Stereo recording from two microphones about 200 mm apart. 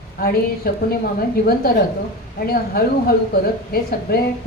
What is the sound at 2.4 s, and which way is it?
Speech, 50° left (ahead or behind).